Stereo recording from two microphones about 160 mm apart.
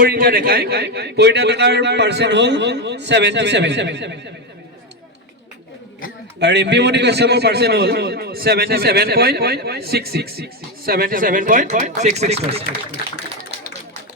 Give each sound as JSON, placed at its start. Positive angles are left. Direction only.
{"t": 0.0, "sound": "a man's voice", "side_deg": -65}
{"t": 6.4, "sound": "a man's voice", "side_deg": -90}